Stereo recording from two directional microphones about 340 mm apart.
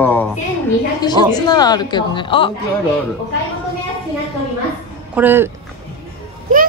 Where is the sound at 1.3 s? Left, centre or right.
Centre.